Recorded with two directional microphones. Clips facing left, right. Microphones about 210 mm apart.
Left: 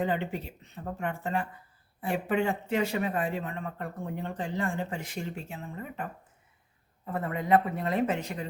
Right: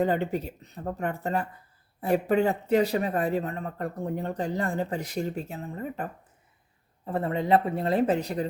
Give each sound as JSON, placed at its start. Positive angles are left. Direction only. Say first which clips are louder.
{"t": 0.0, "sound": "speech", "louder": "right 5 dB", "side_deg": -40}